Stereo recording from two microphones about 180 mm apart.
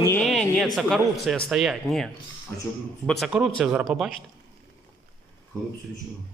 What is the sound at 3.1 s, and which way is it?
Speech, centre (ahead or behind).